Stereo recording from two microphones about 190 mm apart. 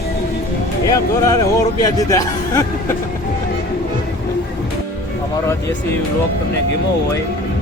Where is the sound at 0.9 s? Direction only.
20° left (ahead or behind).